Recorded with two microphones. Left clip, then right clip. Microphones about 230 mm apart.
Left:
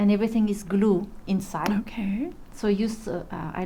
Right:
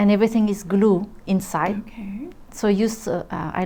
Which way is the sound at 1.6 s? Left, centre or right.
Left.